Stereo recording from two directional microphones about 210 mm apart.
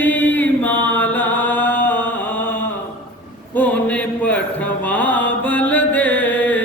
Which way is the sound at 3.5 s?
10° left (ahead or behind).